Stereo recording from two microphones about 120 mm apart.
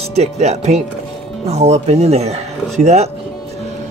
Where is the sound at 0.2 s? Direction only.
70° right (ahead or behind).